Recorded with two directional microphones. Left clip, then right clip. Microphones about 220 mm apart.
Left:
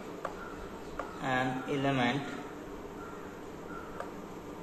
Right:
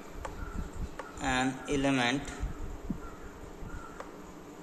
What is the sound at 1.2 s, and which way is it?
Speech, 60° right (ahead or behind).